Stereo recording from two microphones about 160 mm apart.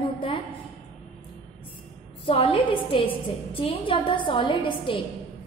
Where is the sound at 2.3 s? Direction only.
35° left (ahead or behind).